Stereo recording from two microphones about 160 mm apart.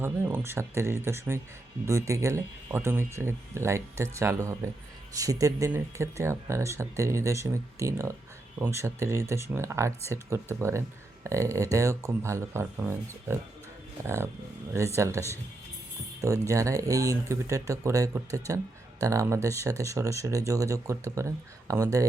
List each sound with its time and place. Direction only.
0.0 s speech: 15° right (ahead or behind)